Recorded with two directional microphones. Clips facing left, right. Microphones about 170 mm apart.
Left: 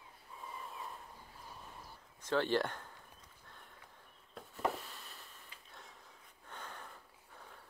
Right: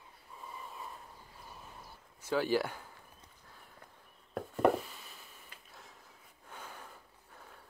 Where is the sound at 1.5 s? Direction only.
5° right (ahead or behind).